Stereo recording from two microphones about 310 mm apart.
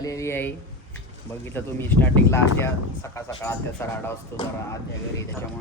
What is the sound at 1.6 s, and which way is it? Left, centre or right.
Speech, centre.